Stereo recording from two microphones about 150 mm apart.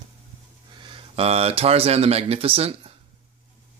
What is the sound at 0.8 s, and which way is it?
Speech, 40° right (ahead or behind).